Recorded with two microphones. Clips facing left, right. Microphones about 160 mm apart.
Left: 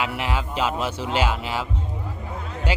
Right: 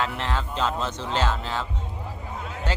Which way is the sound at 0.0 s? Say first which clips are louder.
Left 1 dB; 10° left (ahead or behind).